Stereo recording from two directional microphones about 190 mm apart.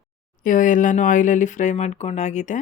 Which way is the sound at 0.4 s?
45° left (ahead or behind).